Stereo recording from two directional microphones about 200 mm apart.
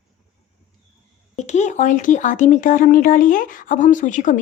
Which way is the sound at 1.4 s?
35° left (ahead or behind).